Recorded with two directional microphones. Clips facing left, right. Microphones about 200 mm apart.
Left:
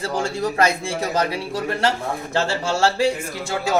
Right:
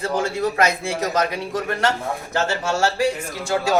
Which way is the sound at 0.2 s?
30° left (ahead or behind).